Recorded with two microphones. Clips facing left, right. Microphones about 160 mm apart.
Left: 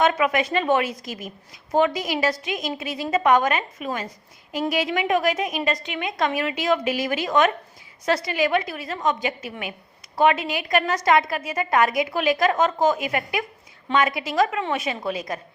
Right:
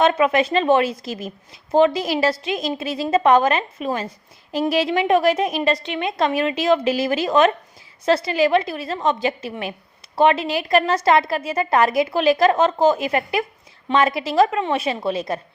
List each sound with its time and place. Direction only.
0.0 s a woman's voice: 30° right (ahead or behind)